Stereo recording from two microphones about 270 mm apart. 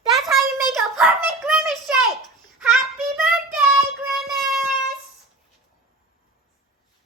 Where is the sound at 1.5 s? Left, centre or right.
Centre.